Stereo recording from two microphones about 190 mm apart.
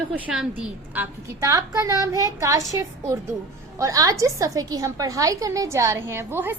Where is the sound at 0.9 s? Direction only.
15° right (ahead or behind).